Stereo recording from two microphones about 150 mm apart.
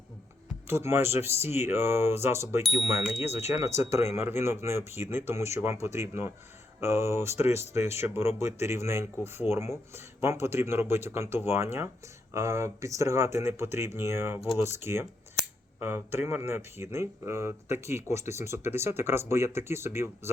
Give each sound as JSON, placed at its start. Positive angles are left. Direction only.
{"t": 0.7, "sound": "speech", "side_deg": -15}